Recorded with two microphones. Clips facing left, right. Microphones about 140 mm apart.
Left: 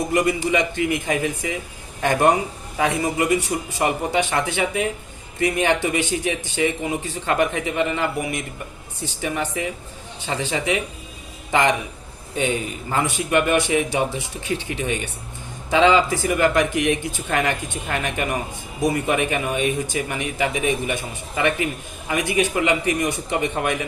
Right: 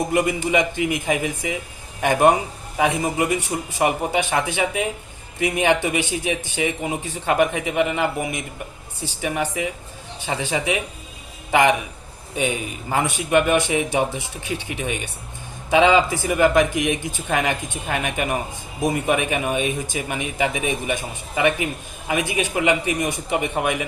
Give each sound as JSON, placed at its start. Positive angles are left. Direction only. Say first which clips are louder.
{"t": 0.1, "sound": "a man's voice", "louder": "left 2 dB", "side_deg": -15}